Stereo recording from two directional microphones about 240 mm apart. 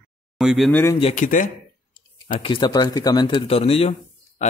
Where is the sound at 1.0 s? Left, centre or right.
Left.